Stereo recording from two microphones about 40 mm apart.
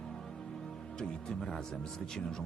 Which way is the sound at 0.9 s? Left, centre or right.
Centre.